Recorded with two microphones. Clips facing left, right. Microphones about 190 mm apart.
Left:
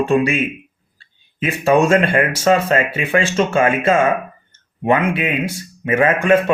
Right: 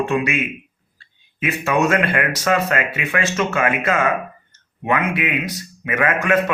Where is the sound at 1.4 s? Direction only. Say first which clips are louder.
Left 5 dB; 30° left (ahead or behind).